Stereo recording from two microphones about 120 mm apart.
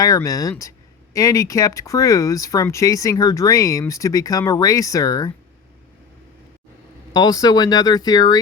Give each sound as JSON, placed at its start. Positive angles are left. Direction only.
{"t": 0.0, "sound": "speech", "side_deg": 30}
{"t": 7.1, "sound": "speech", "side_deg": 35}